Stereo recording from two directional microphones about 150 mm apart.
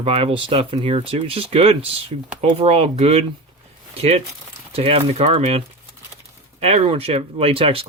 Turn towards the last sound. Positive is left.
turn(degrees=-40)  # may be behind; listen again after turning